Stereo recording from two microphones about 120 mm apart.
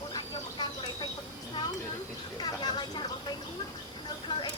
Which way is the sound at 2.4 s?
35° left (ahead or behind).